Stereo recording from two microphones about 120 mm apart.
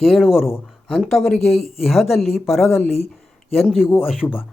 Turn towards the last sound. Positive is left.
turn(degrees=15)  # may be behind; listen again after turning